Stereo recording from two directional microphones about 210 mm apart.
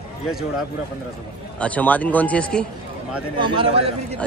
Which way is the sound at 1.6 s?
5° left (ahead or behind).